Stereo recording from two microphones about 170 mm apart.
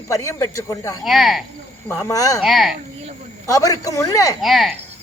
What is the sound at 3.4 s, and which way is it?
Speech, 20° left (ahead or behind).